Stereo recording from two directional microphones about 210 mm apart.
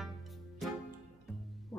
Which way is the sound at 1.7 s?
15° left (ahead or behind).